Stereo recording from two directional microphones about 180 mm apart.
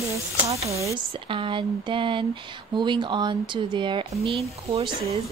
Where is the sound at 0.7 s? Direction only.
30° right (ahead or behind).